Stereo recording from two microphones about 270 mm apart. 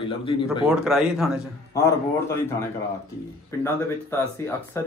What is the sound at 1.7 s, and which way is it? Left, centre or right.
Speech, centre.